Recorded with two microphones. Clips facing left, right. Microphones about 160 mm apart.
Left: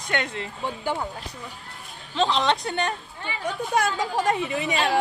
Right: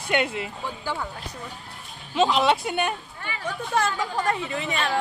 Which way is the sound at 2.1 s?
10° right (ahead or behind).